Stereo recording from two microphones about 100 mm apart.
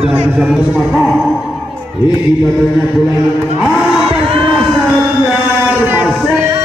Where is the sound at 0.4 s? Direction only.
5° right (ahead or behind).